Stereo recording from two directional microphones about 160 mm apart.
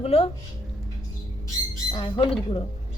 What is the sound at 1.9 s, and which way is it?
Speech, 30° left (ahead or behind).